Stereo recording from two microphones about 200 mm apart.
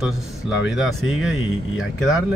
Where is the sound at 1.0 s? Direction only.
90° left.